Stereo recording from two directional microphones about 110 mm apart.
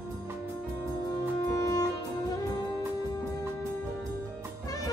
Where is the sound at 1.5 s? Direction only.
30° left (ahead or behind).